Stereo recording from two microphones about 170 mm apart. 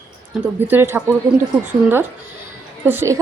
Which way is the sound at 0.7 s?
15° right (ahead or behind).